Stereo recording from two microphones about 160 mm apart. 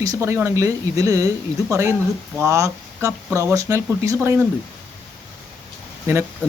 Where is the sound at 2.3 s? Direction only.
15° right (ahead or behind).